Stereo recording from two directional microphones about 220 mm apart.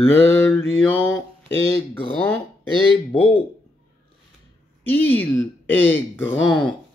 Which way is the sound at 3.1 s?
25° left (ahead or behind).